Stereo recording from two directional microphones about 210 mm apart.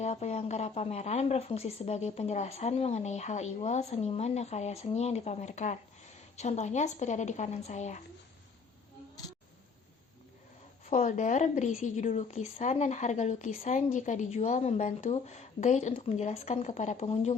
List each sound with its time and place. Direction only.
0.0 s speech: 30° left (ahead or behind)
10.8 s speech: 35° left (ahead or behind)